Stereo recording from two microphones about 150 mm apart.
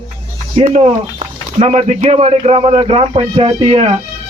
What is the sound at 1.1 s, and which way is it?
Speech, 40° right (ahead or behind).